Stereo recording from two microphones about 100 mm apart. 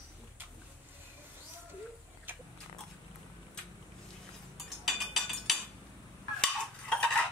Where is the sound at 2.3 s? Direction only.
20° right (ahead or behind).